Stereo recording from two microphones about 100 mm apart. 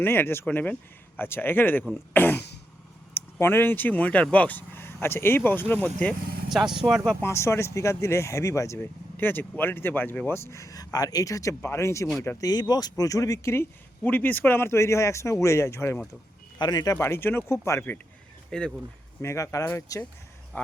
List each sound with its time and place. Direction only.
0.0 s speech: 20° left (ahead or behind)
6.5 s speech: 5° right (ahead or behind)
7.2 s speech: 25° left (ahead or behind)
12.4 s speech: 40° left (ahead or behind)
16.6 s speech: 45° left (ahead or behind); by 18.0 s 20° left (ahead or behind)
18.5 s speech: 5° left (ahead or behind)
19.2 s speech: 30° left (ahead or behind)